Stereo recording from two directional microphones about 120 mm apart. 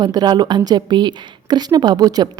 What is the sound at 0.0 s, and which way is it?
A woman's voice, 35° right (ahead or behind).